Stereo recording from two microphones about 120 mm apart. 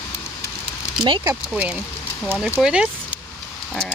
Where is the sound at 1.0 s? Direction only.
40° right (ahead or behind).